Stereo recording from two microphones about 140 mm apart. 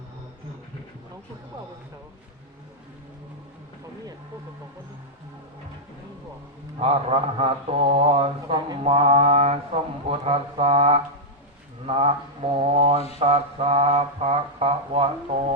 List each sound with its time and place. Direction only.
6.7 s mantra: 45° right (ahead or behind)